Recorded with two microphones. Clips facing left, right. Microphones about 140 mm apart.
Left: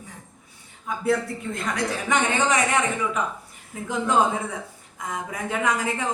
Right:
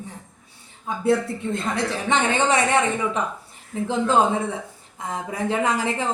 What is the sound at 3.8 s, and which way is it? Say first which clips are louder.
A woman's voice: right 2 dB; 30° right (ahead or behind).